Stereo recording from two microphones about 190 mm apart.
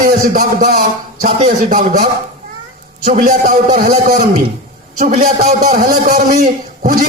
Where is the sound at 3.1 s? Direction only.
45° right (ahead or behind).